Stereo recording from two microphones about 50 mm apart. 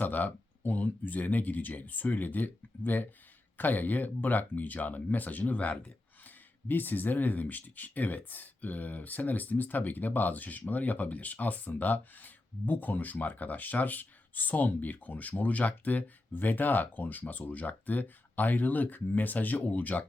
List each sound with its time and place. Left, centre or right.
0.0 s speech: left